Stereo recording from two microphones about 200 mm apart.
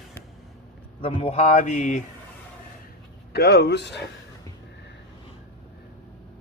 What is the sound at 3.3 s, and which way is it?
Speech, 55° left (ahead or behind).